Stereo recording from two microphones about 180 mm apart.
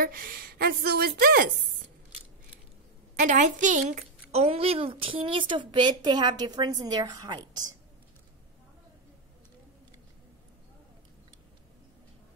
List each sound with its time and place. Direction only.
0.0 s speech: 55° right (ahead or behind)
3.2 s a woman's voice: 45° right (ahead or behind); by 7.7 s 20° right (ahead or behind)